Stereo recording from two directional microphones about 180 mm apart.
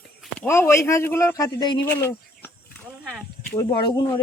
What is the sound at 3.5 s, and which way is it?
Speech, 20° left (ahead or behind).